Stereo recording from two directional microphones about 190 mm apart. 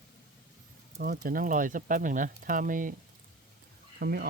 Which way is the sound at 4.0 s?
55° right (ahead or behind).